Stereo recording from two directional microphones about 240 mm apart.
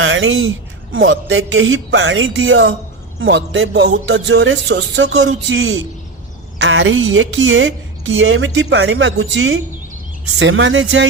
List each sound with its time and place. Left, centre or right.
0.0 s a woman's voice: right
5.0 s a man's voice: right